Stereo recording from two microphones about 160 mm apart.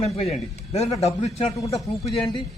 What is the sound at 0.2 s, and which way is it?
Speech, 40° left (ahead or behind).